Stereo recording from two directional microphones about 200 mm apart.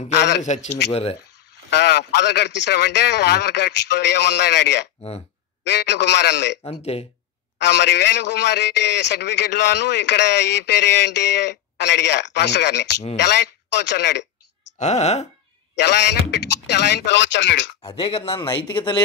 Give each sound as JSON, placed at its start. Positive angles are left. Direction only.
{"t": 0.4, "sound": "speech", "side_deg": 35}
{"t": 1.8, "sound": "a man's voice", "side_deg": 55}
{"t": 6.6, "sound": "a man's voice", "side_deg": 30}
{"t": 7.5, "sound": "a man's voice", "side_deg": 55}
{"t": 14.8, "sound": "speech", "side_deg": 35}
{"t": 15.8, "sound": "a man's voice", "side_deg": 60}
{"t": 17.8, "sound": "a man's voice", "side_deg": 25}